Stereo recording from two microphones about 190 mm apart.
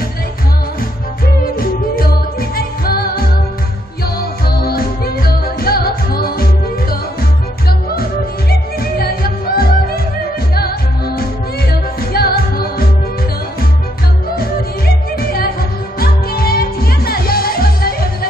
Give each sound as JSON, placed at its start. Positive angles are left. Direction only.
{"t": 1.4, "sound": "music", "side_deg": 50}
{"t": 11.7, "sound": "music", "side_deg": 55}
{"t": 15.1, "sound": "music", "side_deg": 50}